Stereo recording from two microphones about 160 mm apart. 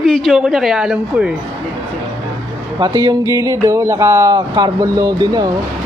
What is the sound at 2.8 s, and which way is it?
Speech, 25° right (ahead or behind).